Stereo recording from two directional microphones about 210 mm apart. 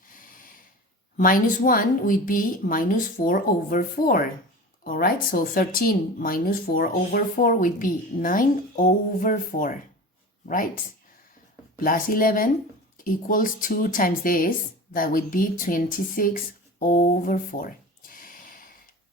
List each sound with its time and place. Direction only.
1.1 s a woman's voice: 40° left (ahead or behind)
11.8 s a woman's voice: 40° left (ahead or behind)
18.1 s snort: 40° left (ahead or behind)